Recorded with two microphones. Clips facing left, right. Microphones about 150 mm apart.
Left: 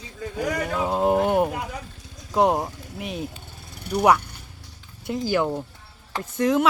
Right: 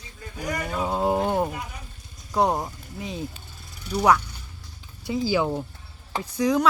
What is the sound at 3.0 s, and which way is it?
Vehicle, 70° left (ahead or behind).